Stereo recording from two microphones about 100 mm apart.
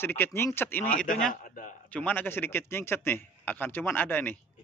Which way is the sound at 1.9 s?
15° left (ahead or behind).